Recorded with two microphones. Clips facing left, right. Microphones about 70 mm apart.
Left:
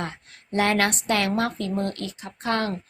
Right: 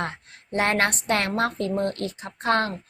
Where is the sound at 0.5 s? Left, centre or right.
Right.